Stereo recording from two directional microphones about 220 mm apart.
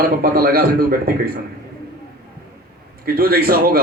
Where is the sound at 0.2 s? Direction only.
40° right (ahead or behind).